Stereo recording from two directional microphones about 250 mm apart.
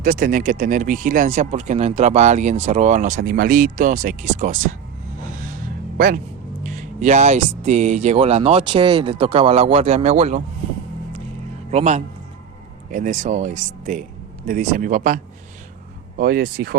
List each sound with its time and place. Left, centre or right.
0.0 s speech: right
6.6 s speech: right
11.7 s speech: right